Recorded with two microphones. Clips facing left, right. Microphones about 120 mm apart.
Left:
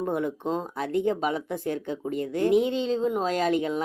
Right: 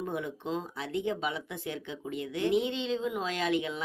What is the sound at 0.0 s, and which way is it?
Speech, 45° left (ahead or behind).